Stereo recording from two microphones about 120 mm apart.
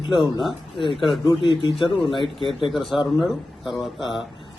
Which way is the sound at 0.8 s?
45° left (ahead or behind).